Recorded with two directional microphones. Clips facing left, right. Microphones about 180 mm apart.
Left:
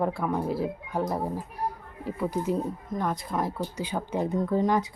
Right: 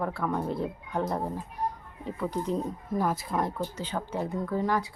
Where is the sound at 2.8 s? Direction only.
5° right (ahead or behind).